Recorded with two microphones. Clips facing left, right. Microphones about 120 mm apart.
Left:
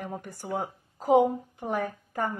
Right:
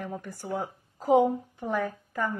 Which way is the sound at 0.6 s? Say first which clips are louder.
Even; 45° left (ahead or behind).